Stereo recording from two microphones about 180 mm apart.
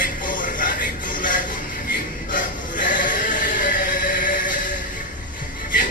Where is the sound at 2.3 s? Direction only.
50° left (ahead or behind).